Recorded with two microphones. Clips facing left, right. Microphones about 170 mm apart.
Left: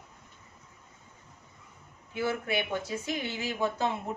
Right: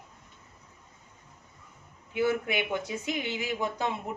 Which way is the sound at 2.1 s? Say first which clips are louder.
Right 3 dB; 20° right (ahead or behind).